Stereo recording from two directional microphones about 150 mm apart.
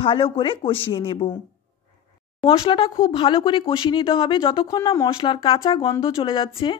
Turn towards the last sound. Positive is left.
turn(degrees=35)  # may be behind; listen again after turning